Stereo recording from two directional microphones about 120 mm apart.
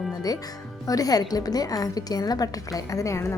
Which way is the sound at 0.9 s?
30° left (ahead or behind).